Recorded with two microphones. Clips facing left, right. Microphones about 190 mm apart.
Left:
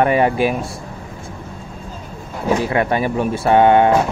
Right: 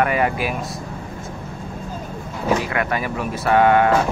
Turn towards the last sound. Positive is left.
turn(degrees=25)  # may be behind; listen again after turning